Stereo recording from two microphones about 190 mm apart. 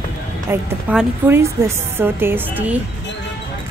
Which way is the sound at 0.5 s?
10° right (ahead or behind).